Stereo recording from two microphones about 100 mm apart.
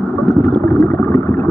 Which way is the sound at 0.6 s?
25° left (ahead or behind).